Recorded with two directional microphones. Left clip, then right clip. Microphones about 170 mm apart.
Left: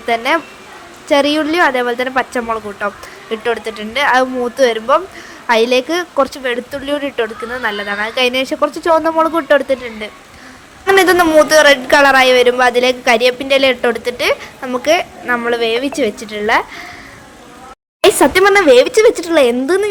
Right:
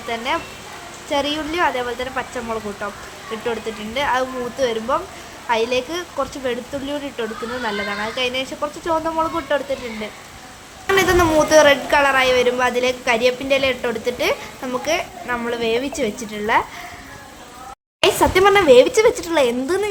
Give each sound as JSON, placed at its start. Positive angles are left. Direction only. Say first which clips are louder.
{"t": 0.1, "sound": "a woman's voice", "louder": "left 8 dB", "side_deg": 35}
{"t": 18.0, "sound": "speech", "louder": "left 5 dB", "side_deg": 35}